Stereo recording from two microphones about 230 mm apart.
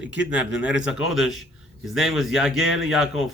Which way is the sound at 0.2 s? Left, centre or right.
Centre.